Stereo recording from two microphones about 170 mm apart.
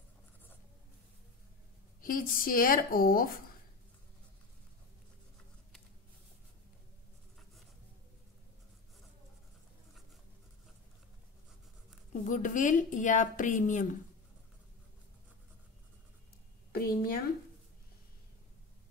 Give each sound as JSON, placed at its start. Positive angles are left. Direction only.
{"t": 2.0, "sound": "a woman's voice", "side_deg": 55}
{"t": 12.1, "sound": "a woman's voice", "side_deg": 50}
{"t": 16.7, "sound": "a woman's voice", "side_deg": 60}